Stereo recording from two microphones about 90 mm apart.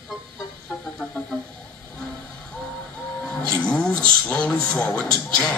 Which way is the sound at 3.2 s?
10° left (ahead or behind).